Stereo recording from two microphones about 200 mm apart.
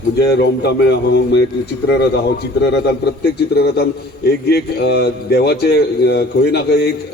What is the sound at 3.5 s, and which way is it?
A man's voice, 50° left (ahead or behind).